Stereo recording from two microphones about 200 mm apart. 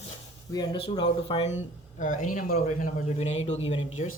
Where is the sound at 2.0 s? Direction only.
40° left (ahead or behind).